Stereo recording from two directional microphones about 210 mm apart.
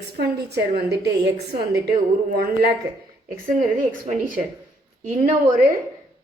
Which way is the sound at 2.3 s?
45° right (ahead or behind).